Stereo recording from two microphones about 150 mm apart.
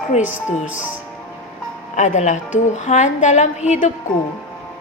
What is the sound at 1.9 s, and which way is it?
A woman's voice, 50° left (ahead or behind).